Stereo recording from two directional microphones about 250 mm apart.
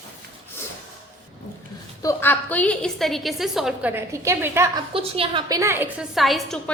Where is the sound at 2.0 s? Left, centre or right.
Centre.